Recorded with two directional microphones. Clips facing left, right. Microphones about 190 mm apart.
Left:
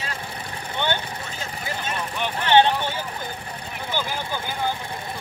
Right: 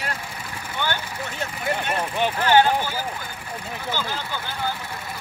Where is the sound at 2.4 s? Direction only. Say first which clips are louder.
Left 1 dB; 25° left (ahead or behind).